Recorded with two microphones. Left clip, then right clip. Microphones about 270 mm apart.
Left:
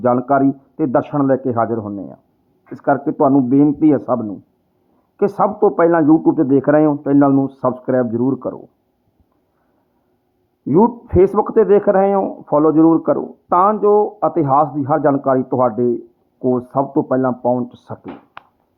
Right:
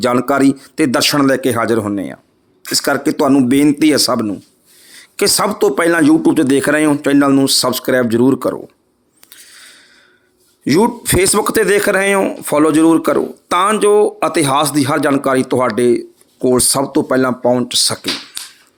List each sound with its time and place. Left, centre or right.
0.0 s speech: right
1.1 s speech: right
5.4 s speech: right
10.7 s speech: right